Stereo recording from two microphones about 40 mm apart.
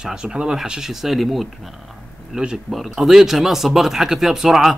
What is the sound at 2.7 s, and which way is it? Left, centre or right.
Speech, centre.